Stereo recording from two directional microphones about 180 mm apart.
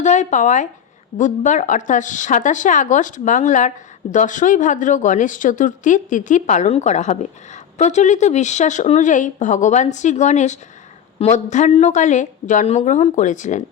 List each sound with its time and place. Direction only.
0.0 s speech: 40° left (ahead or behind)